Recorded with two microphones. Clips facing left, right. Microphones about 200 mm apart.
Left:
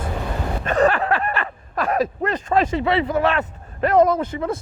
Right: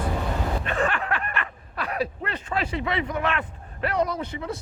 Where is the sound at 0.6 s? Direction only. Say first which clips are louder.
Left 12 dB; 40° left (ahead or behind).